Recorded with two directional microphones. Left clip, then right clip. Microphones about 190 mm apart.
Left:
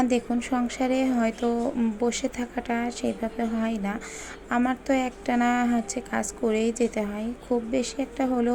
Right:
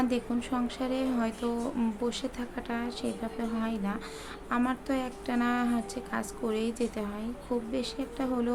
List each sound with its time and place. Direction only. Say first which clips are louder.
0.0 s a woman's voice: left 6 dB; 15° left (ahead or behind)